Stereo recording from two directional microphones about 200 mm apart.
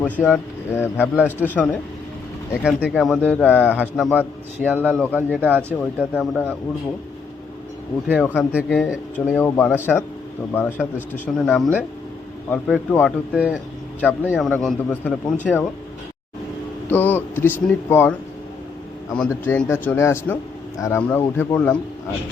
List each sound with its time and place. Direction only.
0.0 s speech: 5° left (ahead or behind)
1.1 s a man's voice: 5° right (ahead or behind)
3.8 s speech: 5° right (ahead or behind)
8.0 s a man's voice: 5° right (ahead or behind)
9.1 s a man's voice: 5° left (ahead or behind)
14.0 s a man's voice: 10° left (ahead or behind)
16.9 s speech: 10° left (ahead or behind)
19.1 s speech: 10° left (ahead or behind)